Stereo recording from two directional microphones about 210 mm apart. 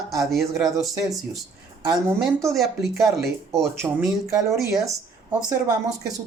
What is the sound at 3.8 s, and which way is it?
Speech, 15° right (ahead or behind).